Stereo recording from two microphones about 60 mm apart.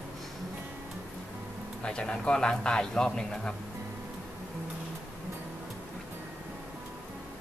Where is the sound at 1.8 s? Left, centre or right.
Centre.